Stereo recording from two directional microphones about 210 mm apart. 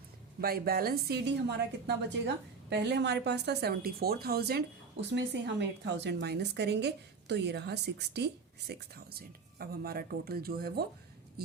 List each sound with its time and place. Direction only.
0.4 s a woman's voice: 45° right (ahead or behind)